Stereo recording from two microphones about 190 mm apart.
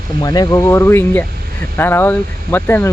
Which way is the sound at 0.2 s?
20° left (ahead or behind).